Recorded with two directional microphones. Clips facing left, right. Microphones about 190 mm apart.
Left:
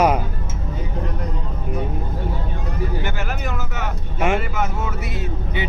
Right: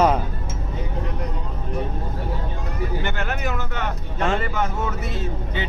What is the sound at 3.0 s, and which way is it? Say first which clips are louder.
Speech: right 1 dB; 5° left (ahead or behind).